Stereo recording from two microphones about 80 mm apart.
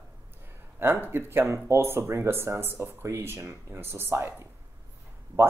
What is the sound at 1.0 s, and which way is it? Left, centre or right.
Speech, right.